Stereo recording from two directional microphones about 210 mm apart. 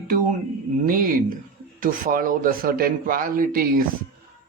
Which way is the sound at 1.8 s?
40° right (ahead or behind).